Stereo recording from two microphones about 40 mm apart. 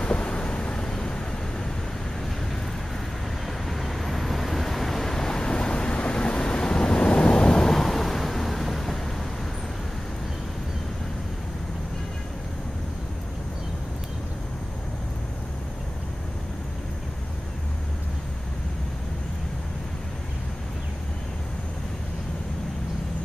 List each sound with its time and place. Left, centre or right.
0.0 s vehicle: left
3.4 s vehicle: centre; by 7.7 s left
7.7 s a sound: centre